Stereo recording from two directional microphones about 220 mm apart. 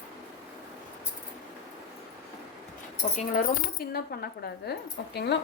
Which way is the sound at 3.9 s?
45° left (ahead or behind).